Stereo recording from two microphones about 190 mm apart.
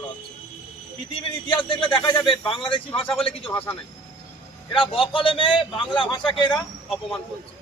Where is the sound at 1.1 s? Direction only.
25° left (ahead or behind).